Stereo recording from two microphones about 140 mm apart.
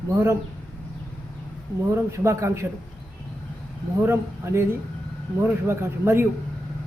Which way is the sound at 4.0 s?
20° right (ahead or behind).